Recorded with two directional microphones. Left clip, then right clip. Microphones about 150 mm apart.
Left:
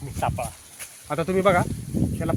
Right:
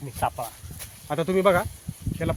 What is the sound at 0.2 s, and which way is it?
Speech, 25° left (ahead or behind).